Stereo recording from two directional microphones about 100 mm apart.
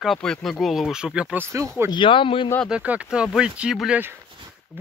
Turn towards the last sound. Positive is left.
turn(degrees=-5)  # may be behind; listen again after turning